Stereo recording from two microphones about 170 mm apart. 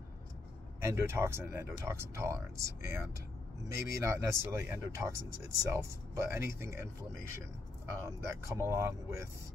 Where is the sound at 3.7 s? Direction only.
15° right (ahead or behind).